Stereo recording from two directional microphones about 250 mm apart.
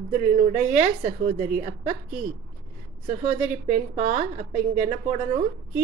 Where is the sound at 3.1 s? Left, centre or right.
Right.